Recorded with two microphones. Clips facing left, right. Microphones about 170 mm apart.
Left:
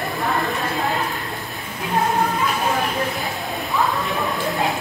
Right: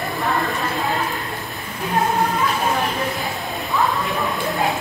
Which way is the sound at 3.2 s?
Centre (ahead or behind).